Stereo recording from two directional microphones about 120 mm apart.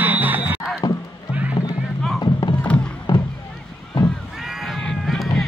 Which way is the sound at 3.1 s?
40° left (ahead or behind).